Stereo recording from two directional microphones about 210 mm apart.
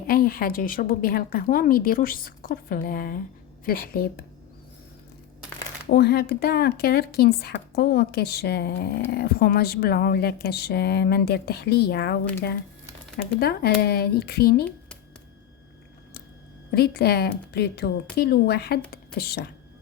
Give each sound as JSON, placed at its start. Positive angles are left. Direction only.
{"t": 0.1, "sound": "a woman's voice", "side_deg": 45}
{"t": 5.9, "sound": "a woman's voice", "side_deg": 50}
{"t": 13.4, "sound": "a woman's voice", "side_deg": 50}
{"t": 16.7, "sound": "a woman's voice", "side_deg": 50}